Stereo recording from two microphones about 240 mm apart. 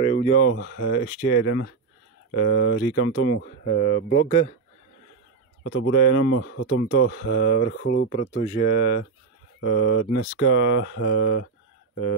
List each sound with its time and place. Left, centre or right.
0.0 s a sound: left
0.5 s speech: left
5.6 s speech: left
6.3 s speech: left
8.1 s speech: left
9.6 s speech: left